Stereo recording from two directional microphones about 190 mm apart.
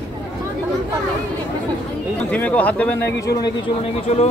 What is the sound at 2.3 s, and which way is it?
Speech, 10° left (ahead or behind).